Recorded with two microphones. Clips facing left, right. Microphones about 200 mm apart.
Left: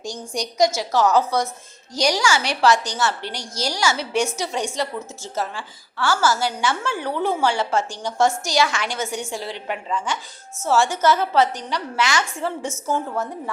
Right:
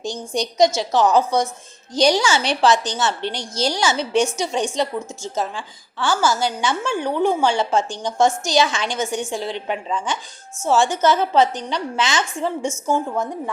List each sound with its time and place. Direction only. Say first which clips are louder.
0.1 s a woman's voice: right 3 dB; 25° right (ahead or behind)